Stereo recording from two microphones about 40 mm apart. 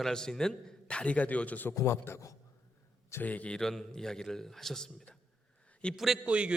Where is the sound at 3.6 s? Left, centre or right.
Centre.